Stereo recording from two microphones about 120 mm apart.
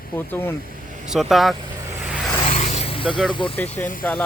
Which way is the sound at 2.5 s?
85° left.